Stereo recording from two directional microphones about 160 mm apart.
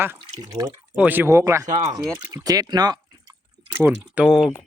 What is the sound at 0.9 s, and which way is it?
Speech, 10° right (ahead or behind).